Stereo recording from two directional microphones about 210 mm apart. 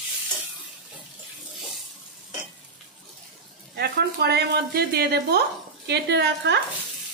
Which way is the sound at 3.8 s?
50° right (ahead or behind).